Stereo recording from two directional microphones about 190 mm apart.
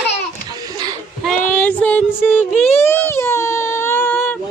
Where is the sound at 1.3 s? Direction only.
10° left (ahead or behind).